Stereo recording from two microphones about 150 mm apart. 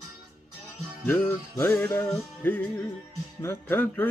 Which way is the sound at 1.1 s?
15° left (ahead or behind).